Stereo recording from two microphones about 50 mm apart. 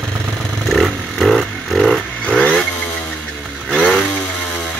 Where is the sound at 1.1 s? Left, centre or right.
Centre.